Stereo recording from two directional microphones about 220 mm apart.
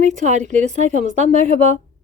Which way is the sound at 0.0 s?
35° right (ahead or behind).